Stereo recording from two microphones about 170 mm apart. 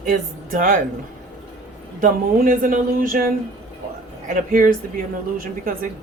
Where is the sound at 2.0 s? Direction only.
55° right (ahead or behind).